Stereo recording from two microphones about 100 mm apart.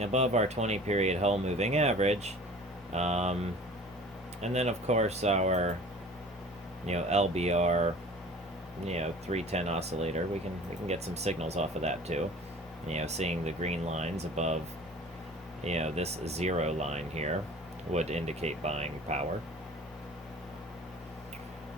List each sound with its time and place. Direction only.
0.0 s speech: 90° right
4.4 s speech: 90° right
6.8 s speech: 90° right
15.6 s speech: 90° right